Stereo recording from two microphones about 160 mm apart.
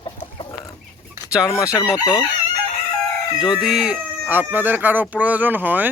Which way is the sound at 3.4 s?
5° right (ahead or behind).